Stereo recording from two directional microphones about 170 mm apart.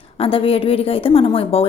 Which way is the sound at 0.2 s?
35° left (ahead or behind).